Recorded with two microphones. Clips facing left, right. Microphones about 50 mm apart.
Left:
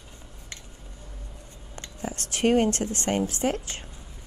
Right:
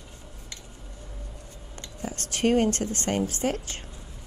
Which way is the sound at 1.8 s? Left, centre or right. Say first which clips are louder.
Left 1 dB; left.